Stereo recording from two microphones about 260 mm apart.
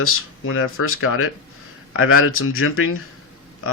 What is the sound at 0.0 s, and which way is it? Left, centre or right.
Speech, left.